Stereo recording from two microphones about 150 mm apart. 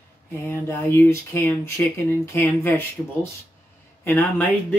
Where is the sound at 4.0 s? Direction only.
10° left (ahead or behind).